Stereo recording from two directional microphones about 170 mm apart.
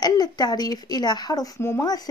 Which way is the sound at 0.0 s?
25° left (ahead or behind).